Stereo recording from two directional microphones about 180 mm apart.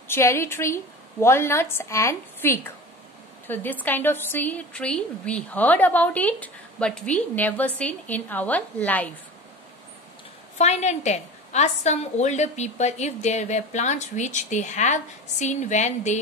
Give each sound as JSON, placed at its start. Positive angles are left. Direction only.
{"t": 0.1, "sound": "a woman's voice", "side_deg": 15}
{"t": 10.6, "sound": "a woman's voice", "side_deg": 40}